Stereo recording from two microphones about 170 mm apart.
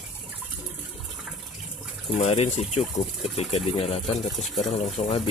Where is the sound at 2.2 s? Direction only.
40° left (ahead or behind).